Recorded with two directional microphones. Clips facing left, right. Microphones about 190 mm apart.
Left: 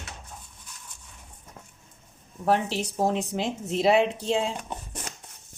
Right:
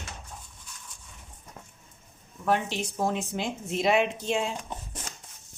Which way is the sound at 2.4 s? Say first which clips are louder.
Left 3 dB; 35° left (ahead or behind).